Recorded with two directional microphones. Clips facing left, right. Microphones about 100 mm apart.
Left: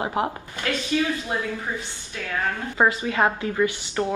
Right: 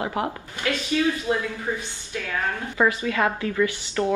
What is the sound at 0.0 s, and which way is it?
Speech, 25° left (ahead or behind).